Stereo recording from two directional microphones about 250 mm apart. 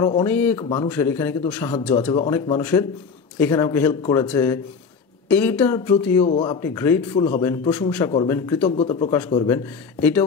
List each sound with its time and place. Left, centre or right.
0.0 s a man's voice: centre
0.6 s speech: centre
0.8 s a man's voice: centre
6.2 s a man's voice: centre
8.7 s a man's voice: left; by 10.2 s centre